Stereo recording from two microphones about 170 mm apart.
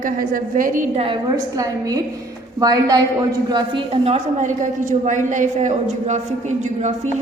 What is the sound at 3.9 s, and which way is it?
A woman's voice, 35° right (ahead or behind).